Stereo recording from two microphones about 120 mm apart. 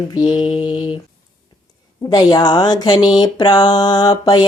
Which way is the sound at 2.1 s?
35° left (ahead or behind).